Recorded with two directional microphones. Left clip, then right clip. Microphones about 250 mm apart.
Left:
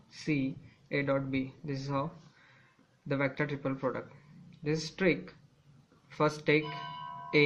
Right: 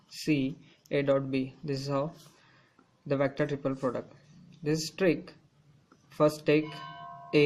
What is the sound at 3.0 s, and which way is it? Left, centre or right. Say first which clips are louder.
Speech: right 4 dB; right.